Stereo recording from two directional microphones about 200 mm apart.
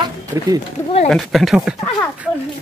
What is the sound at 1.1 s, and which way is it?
Speech, centre (ahead or behind).